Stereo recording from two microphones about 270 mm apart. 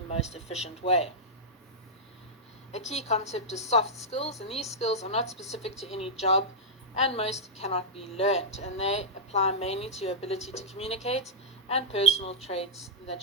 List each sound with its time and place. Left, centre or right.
0.1 s speech: left
2.7 s speech: left